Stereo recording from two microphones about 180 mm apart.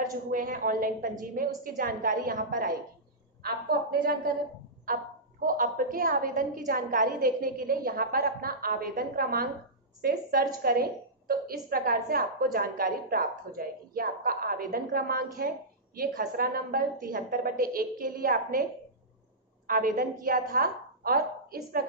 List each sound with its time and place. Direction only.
0.1 s a woman's voice: 50° right (ahead or behind)